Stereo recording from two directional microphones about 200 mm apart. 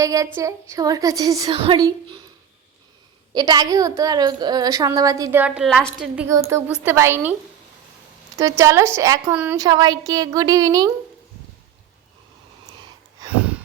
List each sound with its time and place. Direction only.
0.0 s a woman's voice: 15° right (ahead or behind)
3.3 s a woman's voice: 20° right (ahead or behind); by 6.2 s centre (ahead or behind)
6.2 s a woman's voice: 15° right (ahead or behind)
8.4 s a woman's voice: 15° right (ahead or behind)
13.3 s a sound: 5° right (ahead or behind)